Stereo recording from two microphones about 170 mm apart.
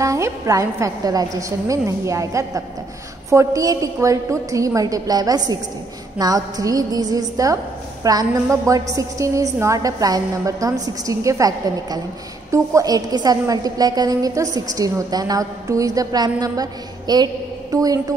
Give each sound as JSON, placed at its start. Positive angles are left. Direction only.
{"t": 0.0, "sound": "a woman's voice", "side_deg": -20}